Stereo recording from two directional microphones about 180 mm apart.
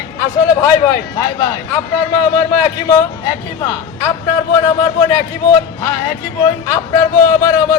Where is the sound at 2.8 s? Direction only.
20° left (ahead or behind).